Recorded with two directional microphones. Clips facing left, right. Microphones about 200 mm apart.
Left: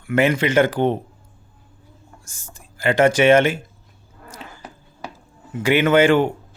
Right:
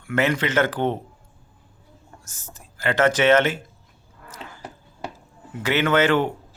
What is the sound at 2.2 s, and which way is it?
Speech, 10° left (ahead or behind).